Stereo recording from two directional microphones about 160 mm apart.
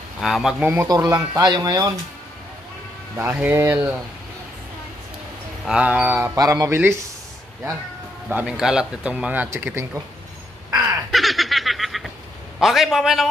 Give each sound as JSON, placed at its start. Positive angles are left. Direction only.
{"t": 0.2, "sound": "a man's voice", "side_deg": 0}
{"t": 1.1, "sound": "speech", "side_deg": -25}
{"t": 3.2, "sound": "speech", "side_deg": -15}
{"t": 5.7, "sound": "speech", "side_deg": -10}
{"t": 8.3, "sound": "speech", "side_deg": -10}
{"t": 11.1, "sound": "snicker", "side_deg": 0}
{"t": 12.5, "sound": "a man's voice", "side_deg": 0}